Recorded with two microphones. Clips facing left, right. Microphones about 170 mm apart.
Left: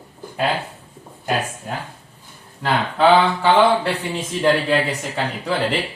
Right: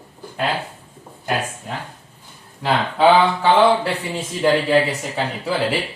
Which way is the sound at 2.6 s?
Centre (ahead or behind).